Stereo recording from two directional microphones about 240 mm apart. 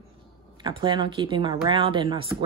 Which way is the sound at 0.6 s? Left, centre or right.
Centre.